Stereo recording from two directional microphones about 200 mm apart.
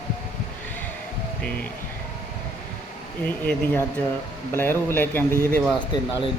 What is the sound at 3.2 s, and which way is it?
Speech, 10° left (ahead or behind).